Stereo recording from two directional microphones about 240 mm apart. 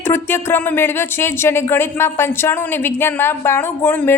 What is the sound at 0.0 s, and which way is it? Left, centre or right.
A woman's voice, centre.